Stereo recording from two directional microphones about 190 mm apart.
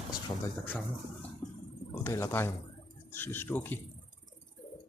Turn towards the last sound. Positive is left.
turn(degrees=10)  # may be behind; listen again after turning